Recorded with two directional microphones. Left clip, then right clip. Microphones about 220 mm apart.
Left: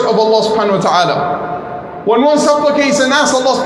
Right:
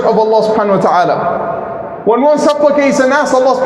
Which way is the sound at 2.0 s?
30° right (ahead or behind).